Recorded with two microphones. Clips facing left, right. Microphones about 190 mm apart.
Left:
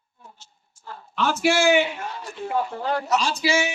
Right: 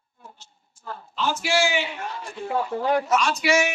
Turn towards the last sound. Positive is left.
turn(degrees=30)  # may be behind; listen again after turning